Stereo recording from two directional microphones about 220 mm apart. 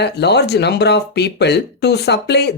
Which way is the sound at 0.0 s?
50° left (ahead or behind).